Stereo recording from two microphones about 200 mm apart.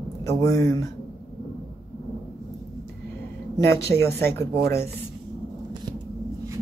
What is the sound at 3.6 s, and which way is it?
Speech, 15° left (ahead or behind).